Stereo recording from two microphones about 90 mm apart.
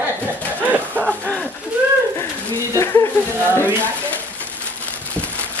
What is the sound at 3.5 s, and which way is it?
Speech, 25° right (ahead or behind).